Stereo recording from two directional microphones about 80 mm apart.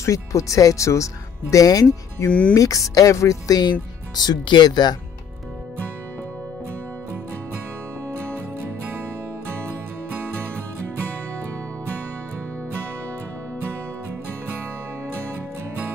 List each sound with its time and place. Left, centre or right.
0.0 s speech: left
2.2 s speech: centre
2.5 s speech: left
4.1 s speech: left